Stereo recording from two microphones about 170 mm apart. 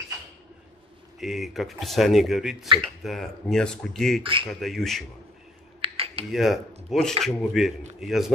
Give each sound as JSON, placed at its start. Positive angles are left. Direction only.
{"t": 1.2, "sound": "speech", "side_deg": 0}
{"t": 4.2, "sound": "speech", "side_deg": -30}
{"t": 4.5, "sound": "speech", "side_deg": 0}
{"t": 5.8, "sound": "a sound", "side_deg": -35}
{"t": 6.3, "sound": "speech", "side_deg": 0}